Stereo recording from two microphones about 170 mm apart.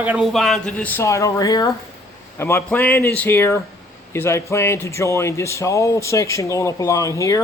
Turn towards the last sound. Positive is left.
turn(degrees=20)  # may be behind; listen again after turning